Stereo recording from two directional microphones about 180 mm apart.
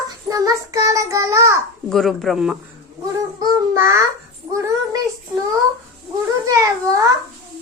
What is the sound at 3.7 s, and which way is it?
Speech, 15° right (ahead or behind).